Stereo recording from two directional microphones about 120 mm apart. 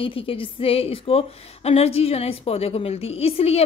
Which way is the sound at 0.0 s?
50° left (ahead or behind).